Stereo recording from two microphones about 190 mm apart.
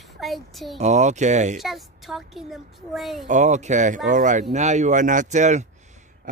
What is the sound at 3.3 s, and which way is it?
Speech, 40° right (ahead or behind).